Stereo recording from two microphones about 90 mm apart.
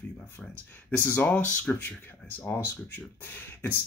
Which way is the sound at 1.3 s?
15° left (ahead or behind).